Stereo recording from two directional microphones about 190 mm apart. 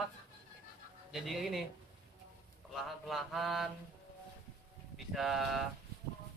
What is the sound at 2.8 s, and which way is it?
Mantra, centre (ahead or behind).